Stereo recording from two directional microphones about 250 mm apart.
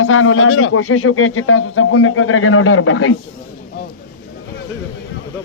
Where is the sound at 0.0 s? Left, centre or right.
Left.